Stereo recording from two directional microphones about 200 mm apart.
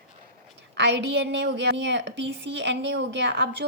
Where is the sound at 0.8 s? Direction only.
60° right (ahead or behind).